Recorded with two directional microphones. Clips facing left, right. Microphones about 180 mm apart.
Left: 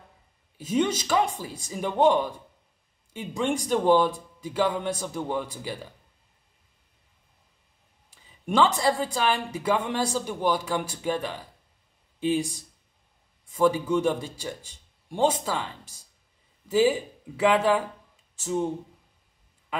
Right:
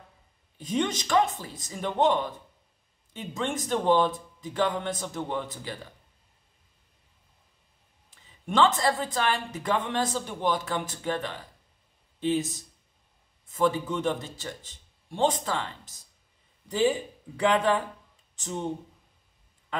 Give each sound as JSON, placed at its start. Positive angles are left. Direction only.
{"t": 0.6, "sound": "a woman's voice", "side_deg": 10}
{"t": 8.1, "sound": "a woman's voice", "side_deg": 10}
{"t": 18.3, "sound": "a sound", "side_deg": 10}